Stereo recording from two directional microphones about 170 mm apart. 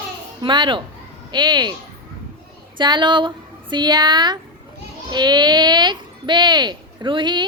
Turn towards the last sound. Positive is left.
turn(degrees=-30)  # may be behind; listen again after turning